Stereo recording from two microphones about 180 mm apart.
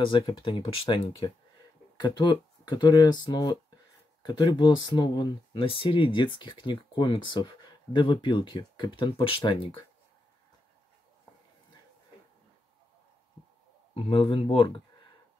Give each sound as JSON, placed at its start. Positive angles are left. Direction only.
{"t": 0.0, "sound": "speech", "side_deg": 25}
{"t": 13.9, "sound": "speech", "side_deg": 30}